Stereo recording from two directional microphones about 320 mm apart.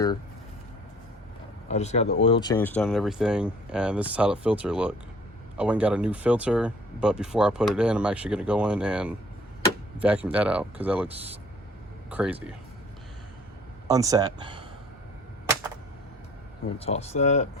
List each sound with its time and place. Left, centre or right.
1.6 s speech: left; by 11.1 s centre
12.1 s speech: centre
13.8 s speech: centre
16.7 s speech: centre